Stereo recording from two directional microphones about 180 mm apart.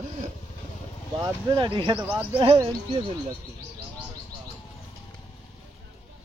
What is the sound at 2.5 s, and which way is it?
Speech, 25° right (ahead or behind).